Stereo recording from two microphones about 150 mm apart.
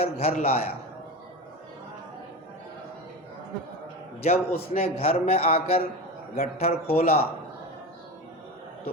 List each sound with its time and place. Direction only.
0.0 s a man's voice: 40° left (ahead or behind)
4.2 s a man's voice: 45° left (ahead or behind)